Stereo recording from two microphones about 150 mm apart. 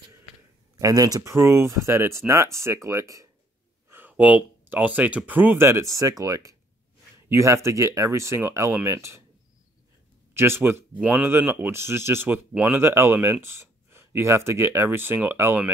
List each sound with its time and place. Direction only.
0.7 s speech: 25° right (ahead or behind)
3.9 s speech: 10° right (ahead or behind)
10.3 s speech: 15° right (ahead or behind)